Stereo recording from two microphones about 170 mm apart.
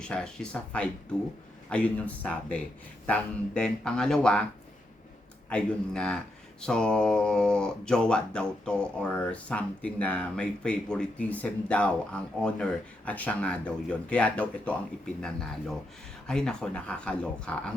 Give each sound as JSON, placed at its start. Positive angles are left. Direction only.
{"t": 0.0, "sound": "speech", "side_deg": 5}
{"t": 5.5, "sound": "speech", "side_deg": 5}